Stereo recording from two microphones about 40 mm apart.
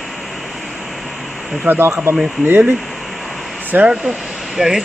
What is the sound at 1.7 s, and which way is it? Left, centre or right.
Speech, right.